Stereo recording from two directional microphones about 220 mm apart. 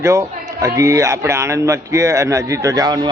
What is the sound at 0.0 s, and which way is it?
A man's voice, 15° right (ahead or behind).